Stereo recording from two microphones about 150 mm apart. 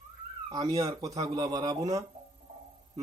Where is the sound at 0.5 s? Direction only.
25° right (ahead or behind).